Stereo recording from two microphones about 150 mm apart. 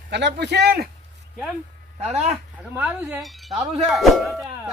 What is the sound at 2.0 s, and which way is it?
Speech, 45° right (ahead or behind).